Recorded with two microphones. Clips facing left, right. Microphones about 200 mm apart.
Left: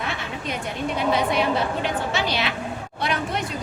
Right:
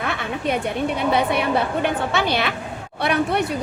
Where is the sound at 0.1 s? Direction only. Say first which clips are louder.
Right 6 dB; 60° right (ahead or behind).